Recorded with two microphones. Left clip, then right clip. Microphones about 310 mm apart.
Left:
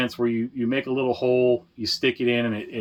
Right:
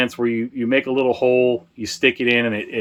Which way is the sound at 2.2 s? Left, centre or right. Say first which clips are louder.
Right 5 dB; right.